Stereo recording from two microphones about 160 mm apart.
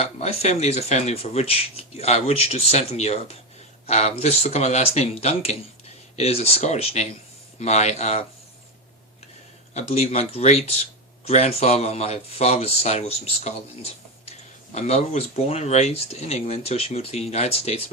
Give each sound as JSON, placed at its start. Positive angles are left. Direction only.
{"t": 0.0, "sound": "speech", "side_deg": 40}
{"t": 9.7, "sound": "speech", "side_deg": 40}